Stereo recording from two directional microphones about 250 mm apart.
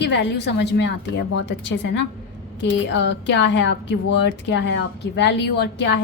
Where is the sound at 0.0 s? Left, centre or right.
Left.